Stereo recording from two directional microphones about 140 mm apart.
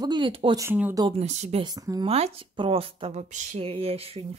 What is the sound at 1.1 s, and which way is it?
Speech, 50° right (ahead or behind).